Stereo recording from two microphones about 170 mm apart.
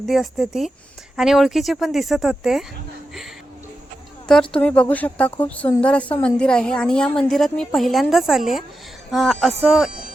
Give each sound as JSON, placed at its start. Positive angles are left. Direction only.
{"t": 0.0, "sound": "a woman's voice", "side_deg": 0}
{"t": 4.5, "sound": "a woman's voice", "side_deg": 5}